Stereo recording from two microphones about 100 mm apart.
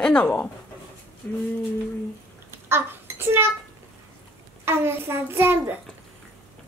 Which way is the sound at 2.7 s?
25° right (ahead or behind).